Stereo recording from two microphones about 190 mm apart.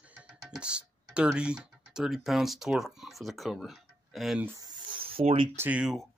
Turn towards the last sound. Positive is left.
turn(degrees=-5)  # may be behind; listen again after turning